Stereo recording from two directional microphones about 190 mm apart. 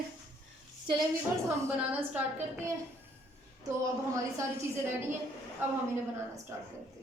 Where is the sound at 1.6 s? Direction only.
10° right (ahead or behind).